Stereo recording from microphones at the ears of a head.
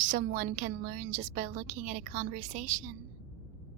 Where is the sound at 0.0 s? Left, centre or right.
Right.